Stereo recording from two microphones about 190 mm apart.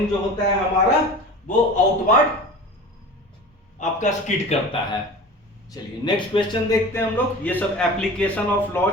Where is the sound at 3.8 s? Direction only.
40° left (ahead or behind).